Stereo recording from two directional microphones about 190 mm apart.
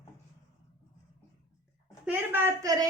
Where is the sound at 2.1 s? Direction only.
10° right (ahead or behind).